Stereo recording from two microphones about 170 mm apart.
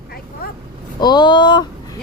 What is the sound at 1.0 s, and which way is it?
Speech, 25° left (ahead or behind).